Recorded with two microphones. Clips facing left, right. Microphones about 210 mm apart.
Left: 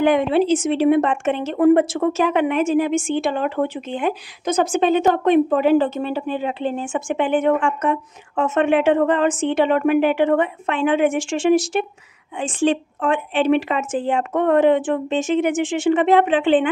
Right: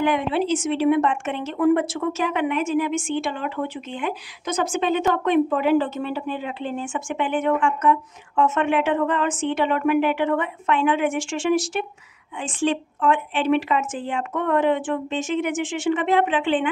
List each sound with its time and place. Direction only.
0.0 s a woman's voice: 30° left (ahead or behind)